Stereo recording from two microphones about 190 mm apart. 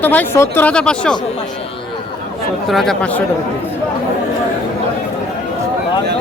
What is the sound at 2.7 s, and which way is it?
Speech, centre (ahead or behind).